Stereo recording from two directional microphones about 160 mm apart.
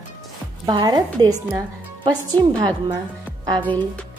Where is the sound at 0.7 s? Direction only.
25° right (ahead or behind).